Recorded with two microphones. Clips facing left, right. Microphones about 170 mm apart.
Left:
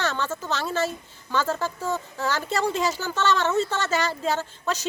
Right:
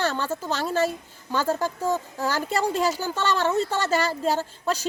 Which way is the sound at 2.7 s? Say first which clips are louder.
Right 2 dB; 40° right (ahead or behind).